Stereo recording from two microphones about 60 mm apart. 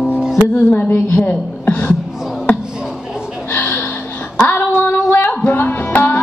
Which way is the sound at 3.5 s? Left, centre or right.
Left.